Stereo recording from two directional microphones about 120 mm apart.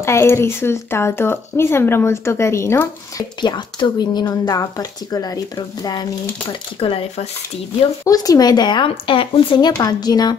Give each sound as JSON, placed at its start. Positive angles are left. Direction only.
{"t": 0.0, "sound": "speech", "side_deg": 20}
{"t": 3.3, "sound": "speech", "side_deg": 40}
{"t": 6.8, "sound": "speech", "side_deg": 50}
{"t": 8.0, "sound": "speech", "side_deg": 30}